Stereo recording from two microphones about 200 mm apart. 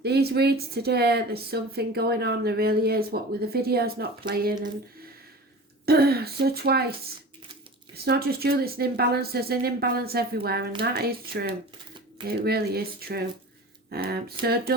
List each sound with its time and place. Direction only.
0.0 s speech: 55° right (ahead or behind)
5.8 s speech: 50° right (ahead or behind)
7.9 s speech: 50° right (ahead or behind)